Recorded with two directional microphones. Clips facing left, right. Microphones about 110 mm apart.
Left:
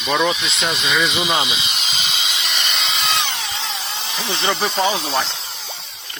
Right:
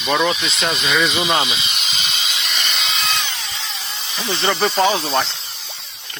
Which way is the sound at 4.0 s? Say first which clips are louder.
Left 3 dB; 30° left (ahead or behind).